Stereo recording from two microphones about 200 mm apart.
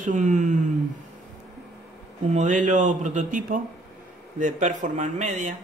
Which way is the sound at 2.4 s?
40° right (ahead or behind).